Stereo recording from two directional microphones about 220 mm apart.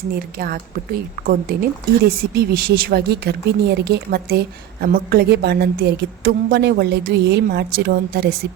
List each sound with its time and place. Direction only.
0.1 s speech: 40° right (ahead or behind)
2.0 s a woman's voice: 45° right (ahead or behind)